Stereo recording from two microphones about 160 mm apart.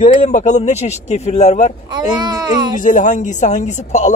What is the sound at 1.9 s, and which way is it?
Speech, 25° right (ahead or behind).